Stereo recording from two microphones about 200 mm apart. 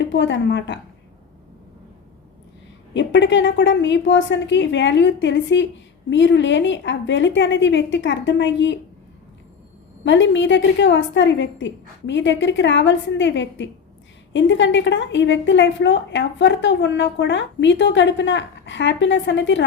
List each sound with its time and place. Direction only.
0.0 s a woman's voice: 65° left (ahead or behind)
2.9 s a woman's voice: 65° left (ahead or behind)
10.0 s a woman's voice: 65° left (ahead or behind)